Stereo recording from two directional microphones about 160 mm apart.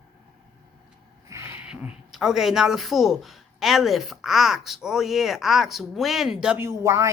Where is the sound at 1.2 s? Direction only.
15° right (ahead or behind).